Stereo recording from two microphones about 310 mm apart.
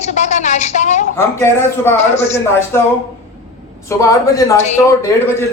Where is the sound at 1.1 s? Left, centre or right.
Centre.